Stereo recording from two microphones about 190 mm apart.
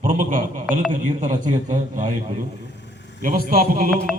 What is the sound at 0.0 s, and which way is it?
A man's voice, 45° right (ahead or behind).